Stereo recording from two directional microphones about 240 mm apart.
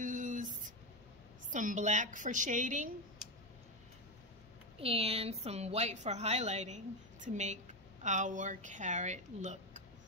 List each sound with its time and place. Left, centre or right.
0.0 s a sound: right
1.5 s a woman's voice: right
4.7 s a woman's voice: right